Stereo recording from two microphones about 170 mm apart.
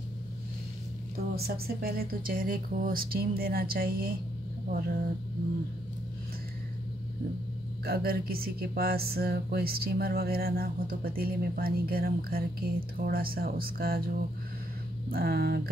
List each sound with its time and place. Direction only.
1.3 s speech: 65° right (ahead or behind)
7.8 s speech: 65° right (ahead or behind)